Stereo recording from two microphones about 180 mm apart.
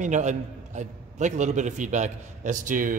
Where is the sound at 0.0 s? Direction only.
40° right (ahead or behind).